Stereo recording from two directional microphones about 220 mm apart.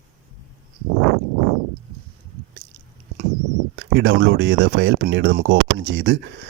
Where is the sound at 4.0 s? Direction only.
55° right (ahead or behind).